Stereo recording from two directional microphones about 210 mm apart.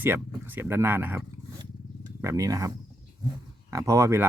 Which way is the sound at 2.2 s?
15° right (ahead or behind).